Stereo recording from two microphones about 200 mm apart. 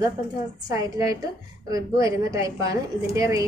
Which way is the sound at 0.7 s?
15° right (ahead or behind).